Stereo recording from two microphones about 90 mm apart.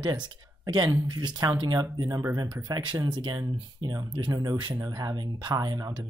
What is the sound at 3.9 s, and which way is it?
Speech, 40° right (ahead or behind).